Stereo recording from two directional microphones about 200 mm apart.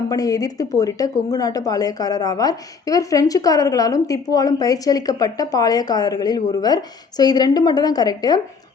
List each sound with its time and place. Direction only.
0.1 s a woman's voice: 15° left (ahead or behind)